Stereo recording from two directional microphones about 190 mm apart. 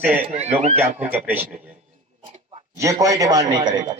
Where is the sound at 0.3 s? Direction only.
35° right (ahead or behind).